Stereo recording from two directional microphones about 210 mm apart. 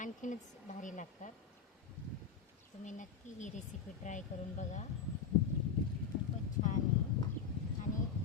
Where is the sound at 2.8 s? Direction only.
35° left (ahead or behind).